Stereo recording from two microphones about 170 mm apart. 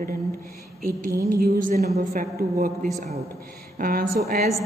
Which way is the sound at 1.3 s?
55° right (ahead or behind).